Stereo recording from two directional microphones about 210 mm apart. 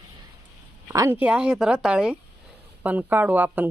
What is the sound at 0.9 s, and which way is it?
Speech, 10° right (ahead or behind).